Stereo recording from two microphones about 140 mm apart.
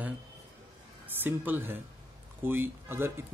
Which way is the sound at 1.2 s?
15° right (ahead or behind).